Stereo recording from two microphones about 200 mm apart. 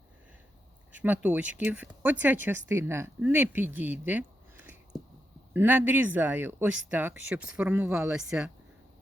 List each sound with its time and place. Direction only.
0.9 s speech: 10° right (ahead or behind)
4.0 s a sound: 10° right (ahead or behind)
5.5 s speech: 10° right (ahead or behind)